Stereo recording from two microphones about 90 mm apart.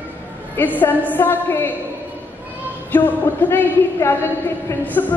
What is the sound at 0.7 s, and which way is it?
Speech, 20° left (ahead or behind).